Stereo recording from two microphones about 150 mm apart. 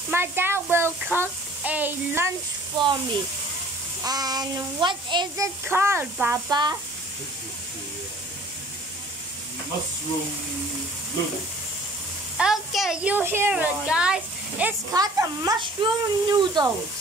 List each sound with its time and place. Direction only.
0.1 s speech: 15° right (ahead or behind)
2.7 s speech: 30° right (ahead or behind)
4.0 s speech: 25° right (ahead or behind)
5.7 s speech: 15° right (ahead or behind)
6.5 s speech: 30° right (ahead or behind)
12.4 s speech: 5° right (ahead or behind)
14.9 s speech: 20° right (ahead or behind)